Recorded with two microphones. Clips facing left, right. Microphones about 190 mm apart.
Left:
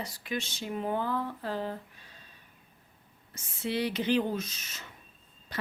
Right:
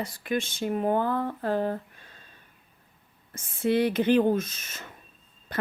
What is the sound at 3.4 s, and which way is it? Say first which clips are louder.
A woman's voice: right 8 dB; 50° right (ahead or behind).